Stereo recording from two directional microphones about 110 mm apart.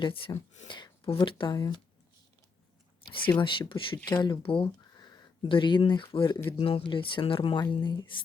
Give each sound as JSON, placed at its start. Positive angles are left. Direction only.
{"t": 0.0, "sound": "speech", "side_deg": 55}
{"t": 3.1, "sound": "speech", "side_deg": 50}
{"t": 6.6, "sound": "speech", "side_deg": 60}